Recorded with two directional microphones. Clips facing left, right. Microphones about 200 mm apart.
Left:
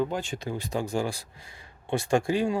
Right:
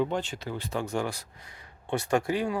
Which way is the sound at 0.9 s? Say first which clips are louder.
Left 2 dB; 30° left (ahead or behind).